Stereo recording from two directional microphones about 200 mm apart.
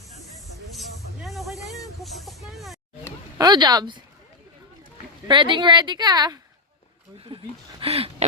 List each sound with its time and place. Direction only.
0.8 s snake: centre (ahead or behind)
3.3 s speech: 20° right (ahead or behind)
5.3 s a woman's voice: 25° right (ahead or behind)
7.3 s a sound: 25° right (ahead or behind)